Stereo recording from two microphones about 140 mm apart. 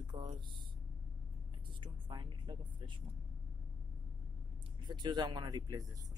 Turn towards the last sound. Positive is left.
turn(degrees=-25)  # may be behind; listen again after turning